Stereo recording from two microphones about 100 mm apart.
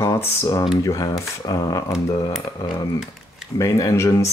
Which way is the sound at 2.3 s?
5° right (ahead or behind).